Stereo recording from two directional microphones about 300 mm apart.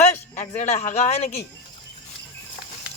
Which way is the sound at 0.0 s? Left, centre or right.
Left.